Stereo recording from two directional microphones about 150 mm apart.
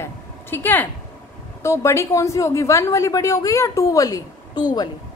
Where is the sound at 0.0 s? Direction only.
15° left (ahead or behind).